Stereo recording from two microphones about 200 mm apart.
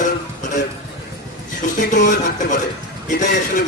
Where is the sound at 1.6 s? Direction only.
40° left (ahead or behind).